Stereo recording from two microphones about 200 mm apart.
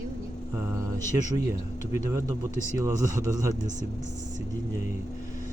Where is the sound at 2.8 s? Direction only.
15° right (ahead or behind).